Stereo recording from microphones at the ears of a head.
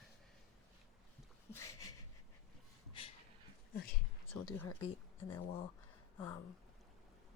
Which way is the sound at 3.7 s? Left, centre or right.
Left.